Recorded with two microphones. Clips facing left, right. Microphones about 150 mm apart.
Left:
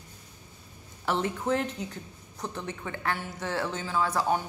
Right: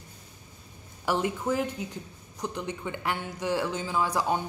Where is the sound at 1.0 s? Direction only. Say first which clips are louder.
Right 1 dB; 10° right (ahead or behind).